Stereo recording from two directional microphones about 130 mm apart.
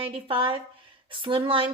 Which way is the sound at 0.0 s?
45° right (ahead or behind).